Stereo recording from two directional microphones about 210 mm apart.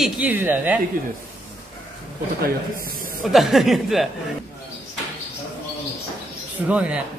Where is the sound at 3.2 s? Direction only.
Centre (ahead or behind).